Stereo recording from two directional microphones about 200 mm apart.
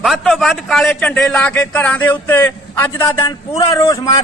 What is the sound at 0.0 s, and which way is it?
A man's voice, centre (ahead or behind).